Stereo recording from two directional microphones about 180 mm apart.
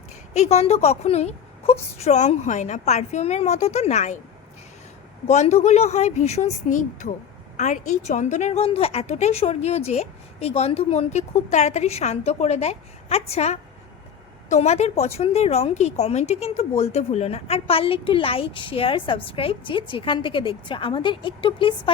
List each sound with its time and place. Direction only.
0.3 s a woman's voice: 35° left (ahead or behind)
5.3 s a woman's voice: 40° left (ahead or behind)